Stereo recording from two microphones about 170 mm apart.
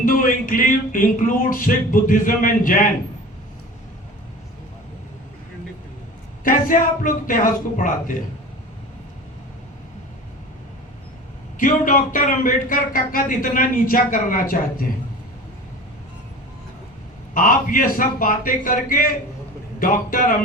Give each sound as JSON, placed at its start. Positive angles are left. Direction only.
{"t": 0.0, "sound": "a man's voice", "side_deg": 55}
{"t": 6.4, "sound": "a man's voice", "side_deg": 55}
{"t": 11.5, "sound": "a man's voice", "side_deg": 55}
{"t": 17.3, "sound": "a man's voice", "side_deg": 55}